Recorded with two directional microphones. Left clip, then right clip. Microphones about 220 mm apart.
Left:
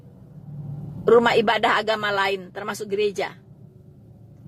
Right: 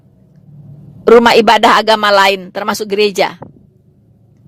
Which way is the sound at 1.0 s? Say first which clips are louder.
Right 10 dB; 40° right (ahead or behind).